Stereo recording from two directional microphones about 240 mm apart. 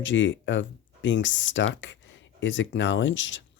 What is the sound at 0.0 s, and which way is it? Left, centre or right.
Speech, left.